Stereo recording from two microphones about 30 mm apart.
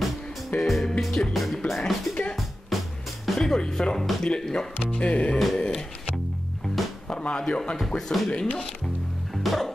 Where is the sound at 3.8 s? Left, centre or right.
Centre.